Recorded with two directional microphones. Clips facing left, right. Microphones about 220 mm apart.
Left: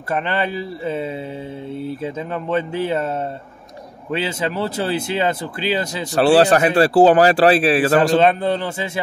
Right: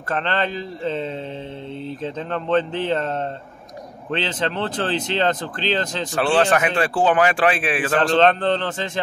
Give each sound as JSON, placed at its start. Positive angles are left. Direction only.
{"t": 0.1, "sound": "speech", "side_deg": 10}
{"t": 6.1, "sound": "speech", "side_deg": 35}
{"t": 7.9, "sound": "speech", "side_deg": 10}